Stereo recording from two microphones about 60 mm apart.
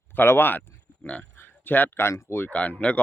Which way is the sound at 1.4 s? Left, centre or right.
Left.